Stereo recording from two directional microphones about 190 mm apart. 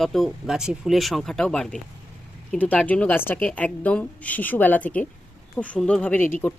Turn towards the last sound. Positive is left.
turn(degrees=10)  # may be behind; listen again after turning